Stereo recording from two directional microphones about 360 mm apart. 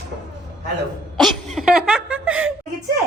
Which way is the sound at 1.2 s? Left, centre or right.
Centre.